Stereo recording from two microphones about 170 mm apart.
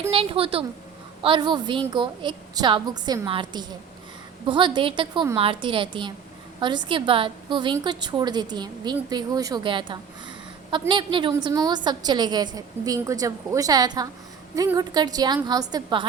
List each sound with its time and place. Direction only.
0.1 s a woman's voice: 35° right (ahead or behind)